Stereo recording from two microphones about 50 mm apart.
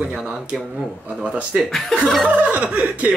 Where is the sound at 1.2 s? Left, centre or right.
Right.